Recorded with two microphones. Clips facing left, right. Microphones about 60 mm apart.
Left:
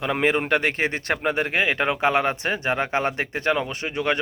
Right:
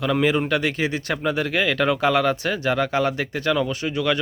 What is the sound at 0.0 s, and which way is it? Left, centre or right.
Speech, left.